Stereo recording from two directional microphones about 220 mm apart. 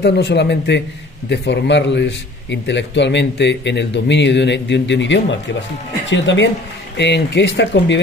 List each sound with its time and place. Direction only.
0.0 s a man's voice: 50° left (ahead or behind)